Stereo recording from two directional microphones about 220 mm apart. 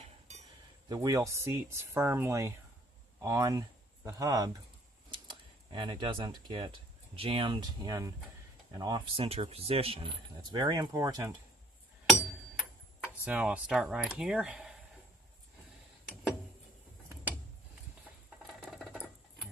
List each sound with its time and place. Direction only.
0.9 s speech: 15° right (ahead or behind)
13.2 s speech: 5° right (ahead or behind)
18.6 s rodents: 5° left (ahead or behind)